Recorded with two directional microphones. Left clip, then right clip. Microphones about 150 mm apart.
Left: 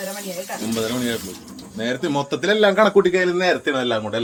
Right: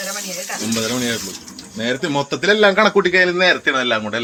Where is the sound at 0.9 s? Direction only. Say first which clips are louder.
Right 3 dB; 45° right (ahead or behind).